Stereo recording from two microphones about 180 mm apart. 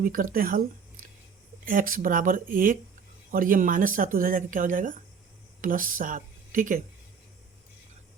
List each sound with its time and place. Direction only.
0.0 s speech: 50° right (ahead or behind)
1.6 s speech: 50° right (ahead or behind)